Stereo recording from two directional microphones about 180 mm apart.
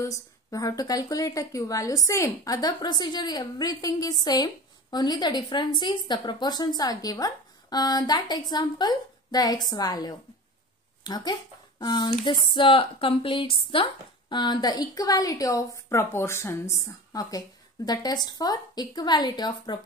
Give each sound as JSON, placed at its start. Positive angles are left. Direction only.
{"t": 0.0, "sound": "a woman's voice", "side_deg": 20}